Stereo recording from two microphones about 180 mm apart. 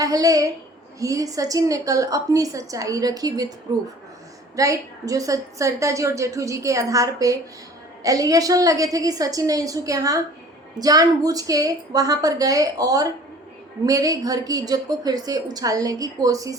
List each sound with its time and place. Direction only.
0.0 s a woman's voice: 20° right (ahead or behind)
4.5 s a woman's voice: 20° right (ahead or behind)